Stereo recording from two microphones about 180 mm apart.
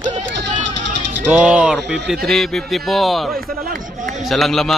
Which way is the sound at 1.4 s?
5° right (ahead or behind).